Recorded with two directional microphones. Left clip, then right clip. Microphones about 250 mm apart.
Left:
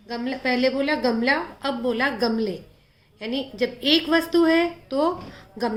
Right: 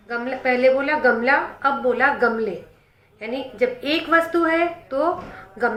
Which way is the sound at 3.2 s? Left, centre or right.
Left.